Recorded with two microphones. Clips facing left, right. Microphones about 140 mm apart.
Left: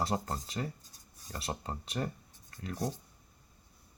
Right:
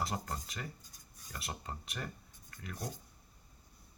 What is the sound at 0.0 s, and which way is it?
Speech, 30° left (ahead or behind).